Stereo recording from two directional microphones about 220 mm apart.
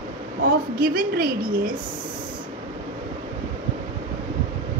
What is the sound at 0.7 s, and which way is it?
A woman's voice, 40° right (ahead or behind).